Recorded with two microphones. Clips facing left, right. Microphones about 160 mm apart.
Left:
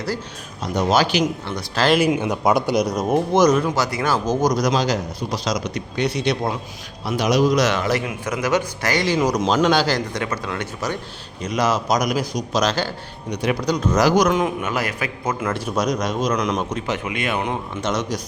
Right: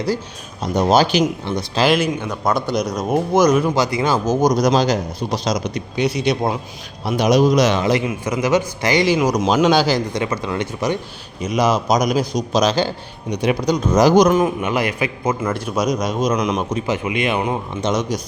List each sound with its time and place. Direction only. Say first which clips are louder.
0.8 s speech: right 4 dB; 30° right (ahead or behind)
1.5 s speech: right 3 dB; 20° right (ahead or behind)
2.0 s a man's voice: left 2 dB; 10° left (ahead or behind)
3.8 s speech: right 3 dB; 15° right (ahead or behind)
6.0 s speech: right 3 dB; 10° right (ahead or behind)
7.0 s speech: right 3 dB; 20° right (ahead or behind)
8.0 s speech: right 4 dB; 10° right (ahead or behind)
14.3 s speech: right 4 dB; 10° right (ahead or behind)
16.0 s speech: right 2 dB; 15° right (ahead or behind)